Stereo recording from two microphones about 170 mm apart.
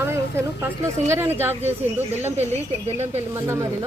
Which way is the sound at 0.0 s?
15° right (ahead or behind).